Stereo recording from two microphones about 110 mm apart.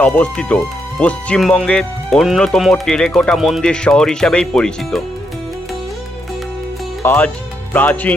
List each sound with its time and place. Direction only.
0.0 s speech: 10° left (ahead or behind)
7.0 s speech: 20° left (ahead or behind)